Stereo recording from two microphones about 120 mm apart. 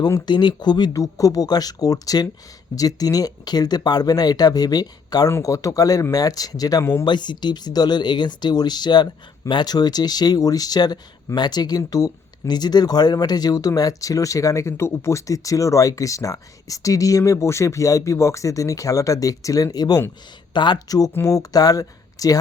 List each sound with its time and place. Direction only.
0.0 s speech: 35° left (ahead or behind)
7.0 s speech: 40° left (ahead or behind)